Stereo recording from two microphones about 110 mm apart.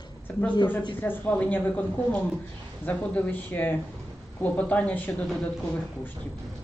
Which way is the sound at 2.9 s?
15° left (ahead or behind).